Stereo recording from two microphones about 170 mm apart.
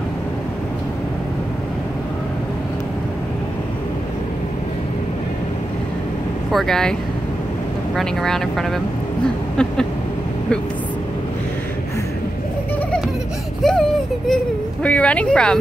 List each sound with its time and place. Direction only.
6.5 s speech: centre (ahead or behind)
13.6 s a sound: 5° left (ahead or behind)
14.3 s a child's voice: 5° left (ahead or behind)